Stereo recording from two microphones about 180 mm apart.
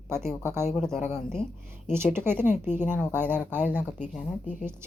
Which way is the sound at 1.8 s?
10° right (ahead or behind).